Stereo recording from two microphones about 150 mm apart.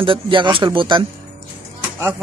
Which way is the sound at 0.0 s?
35° right (ahead or behind).